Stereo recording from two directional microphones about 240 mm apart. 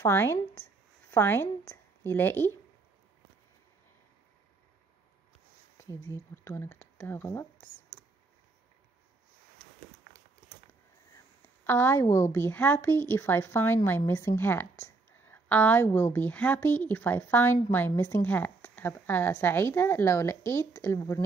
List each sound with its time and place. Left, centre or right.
0.0 s a woman's voice: centre
5.8 s speech: centre
10.7 s speech: centre